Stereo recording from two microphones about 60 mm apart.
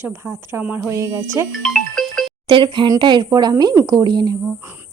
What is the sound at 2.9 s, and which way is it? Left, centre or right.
Speech, right.